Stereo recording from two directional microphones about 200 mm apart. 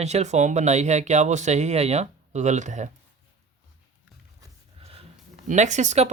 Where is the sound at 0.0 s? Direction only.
35° right (ahead or behind).